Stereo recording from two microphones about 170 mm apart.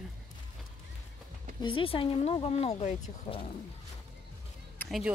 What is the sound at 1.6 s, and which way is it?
Speech, 30° left (ahead or behind).